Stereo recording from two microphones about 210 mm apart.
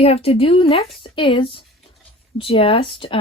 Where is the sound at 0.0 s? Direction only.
30° left (ahead or behind).